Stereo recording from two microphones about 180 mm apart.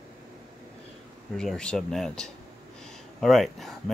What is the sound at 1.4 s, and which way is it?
Speech, 5° left (ahead or behind).